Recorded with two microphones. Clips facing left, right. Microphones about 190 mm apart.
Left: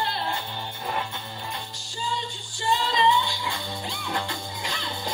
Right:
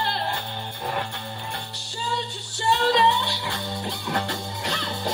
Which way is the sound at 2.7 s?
70° right (ahead or behind).